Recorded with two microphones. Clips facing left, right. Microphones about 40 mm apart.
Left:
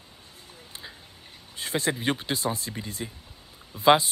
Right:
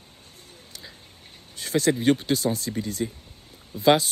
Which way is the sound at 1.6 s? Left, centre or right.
Left.